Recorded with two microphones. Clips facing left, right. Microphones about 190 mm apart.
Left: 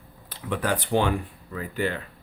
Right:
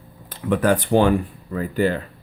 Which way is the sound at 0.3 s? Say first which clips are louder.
Right 8 dB; 50° right (ahead or behind).